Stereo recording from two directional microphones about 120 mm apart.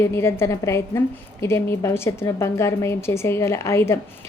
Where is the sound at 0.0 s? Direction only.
20° left (ahead or behind).